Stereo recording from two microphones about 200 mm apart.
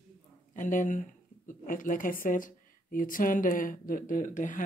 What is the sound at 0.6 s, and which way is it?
Speech, 40° left (ahead or behind).